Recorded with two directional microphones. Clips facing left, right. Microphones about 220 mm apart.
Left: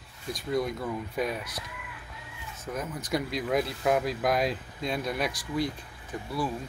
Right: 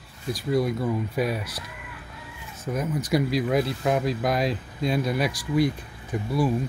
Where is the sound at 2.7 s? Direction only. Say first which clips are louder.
Right 6 dB; 15° right (ahead or behind).